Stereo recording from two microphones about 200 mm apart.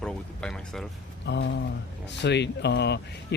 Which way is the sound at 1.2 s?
60° left (ahead or behind).